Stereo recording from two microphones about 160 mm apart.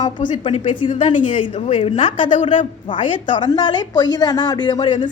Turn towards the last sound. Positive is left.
turn(degrees=30)  # may be behind; listen again after turning